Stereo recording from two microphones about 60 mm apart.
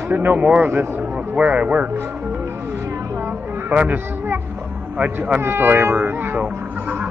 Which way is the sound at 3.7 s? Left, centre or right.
Right.